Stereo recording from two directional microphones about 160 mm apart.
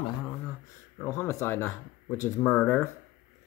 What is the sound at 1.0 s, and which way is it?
Speech, 15° left (ahead or behind).